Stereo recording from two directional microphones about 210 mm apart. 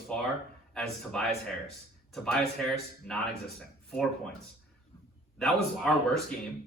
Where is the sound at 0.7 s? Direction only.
Centre (ahead or behind).